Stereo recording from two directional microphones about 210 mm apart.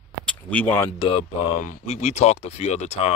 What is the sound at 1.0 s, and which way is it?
Speech, 25° left (ahead or behind).